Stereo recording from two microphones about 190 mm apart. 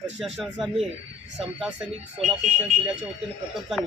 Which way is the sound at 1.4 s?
Centre (ahead or behind).